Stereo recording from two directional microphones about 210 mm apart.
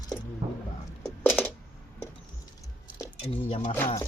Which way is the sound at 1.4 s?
5° right (ahead or behind).